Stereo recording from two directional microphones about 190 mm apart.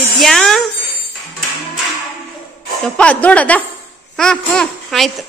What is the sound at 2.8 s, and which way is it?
A woman's voice, 5° left (ahead or behind).